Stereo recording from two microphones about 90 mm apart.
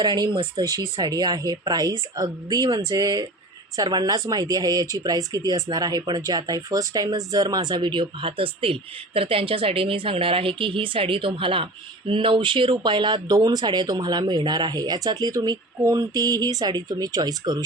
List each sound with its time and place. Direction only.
0.0 s speech: 50° right (ahead or behind)